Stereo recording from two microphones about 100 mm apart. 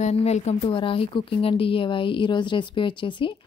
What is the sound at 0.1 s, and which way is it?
Speech, 90° left.